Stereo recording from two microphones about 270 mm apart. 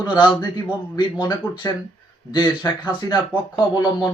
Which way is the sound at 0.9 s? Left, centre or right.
Centre.